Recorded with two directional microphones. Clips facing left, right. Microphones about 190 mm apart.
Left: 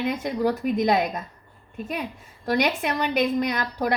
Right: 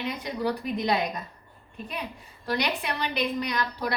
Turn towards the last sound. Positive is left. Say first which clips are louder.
# left 5 dB
turn(degrees=50)  # may be behind; listen again after turning